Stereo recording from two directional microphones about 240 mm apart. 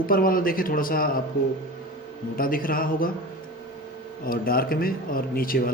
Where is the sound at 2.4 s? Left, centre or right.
Left.